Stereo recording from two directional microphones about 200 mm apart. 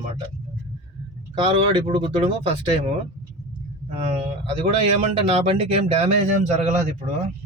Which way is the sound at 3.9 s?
30° right (ahead or behind).